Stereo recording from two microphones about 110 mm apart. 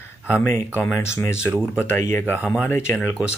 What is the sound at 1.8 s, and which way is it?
Speech, 20° left (ahead or behind).